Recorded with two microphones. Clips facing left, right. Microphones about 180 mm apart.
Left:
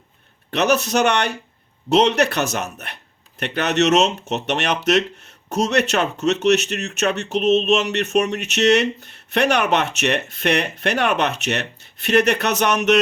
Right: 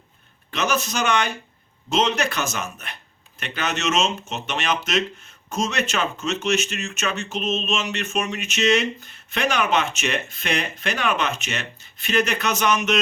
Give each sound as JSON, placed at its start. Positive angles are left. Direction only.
{"t": 0.5, "sound": "speech", "side_deg": 65}